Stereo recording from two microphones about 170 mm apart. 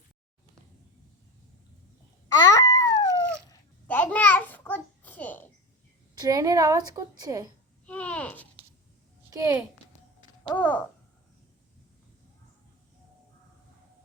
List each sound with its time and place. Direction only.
2.3 s babbling: 20° left (ahead or behind)
3.8 s a sound: 10° left (ahead or behind)
6.1 s a woman's voice: 20° right (ahead or behind)
7.9 s a sound: 10° left (ahead or behind)
9.3 s a woman's voice: 20° right (ahead or behind)
10.6 s a child's voice: 10° left (ahead or behind)